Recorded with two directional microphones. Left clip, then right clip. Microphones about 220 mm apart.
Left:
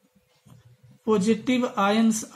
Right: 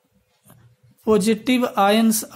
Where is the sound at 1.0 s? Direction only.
45° right (ahead or behind).